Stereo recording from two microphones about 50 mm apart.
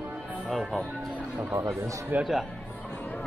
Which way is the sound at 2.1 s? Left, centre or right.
Right.